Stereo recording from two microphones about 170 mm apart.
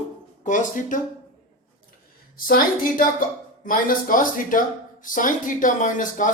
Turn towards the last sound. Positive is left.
turn(degrees=50)  # may be behind; listen again after turning